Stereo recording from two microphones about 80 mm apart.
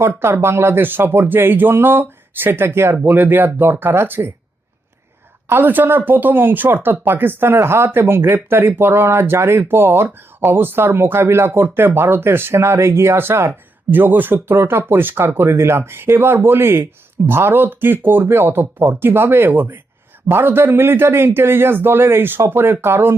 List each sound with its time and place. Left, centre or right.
0.0 s speech: right
5.5 s speech: right